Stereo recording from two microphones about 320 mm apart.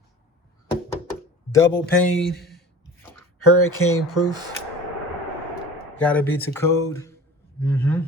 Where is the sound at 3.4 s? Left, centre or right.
Left.